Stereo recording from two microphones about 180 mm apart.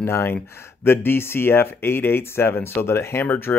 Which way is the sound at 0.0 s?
15° left (ahead or behind).